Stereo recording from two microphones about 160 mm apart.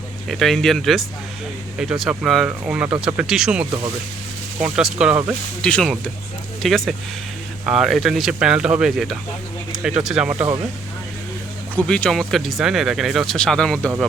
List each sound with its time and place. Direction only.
0.3 s speech: centre (ahead or behind)
5.6 s speech: 5° left (ahead or behind)
11.8 s speech: 5° left (ahead or behind)